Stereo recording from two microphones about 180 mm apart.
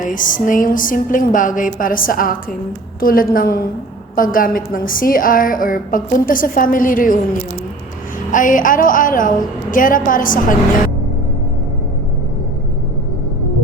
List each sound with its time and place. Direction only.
0.0 s a woman's voice: 50° left (ahead or behind)
8.3 s a woman's voice: 45° left (ahead or behind)